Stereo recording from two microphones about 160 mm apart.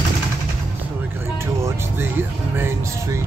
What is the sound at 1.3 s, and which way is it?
Music, 15° right (ahead or behind).